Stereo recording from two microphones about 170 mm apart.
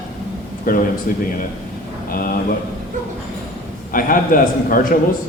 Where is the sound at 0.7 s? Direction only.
55° left (ahead or behind).